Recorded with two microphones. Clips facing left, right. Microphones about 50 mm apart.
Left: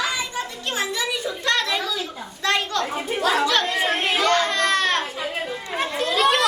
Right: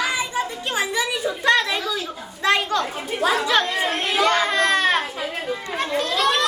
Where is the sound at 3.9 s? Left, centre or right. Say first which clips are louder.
Left 2 dB; centre.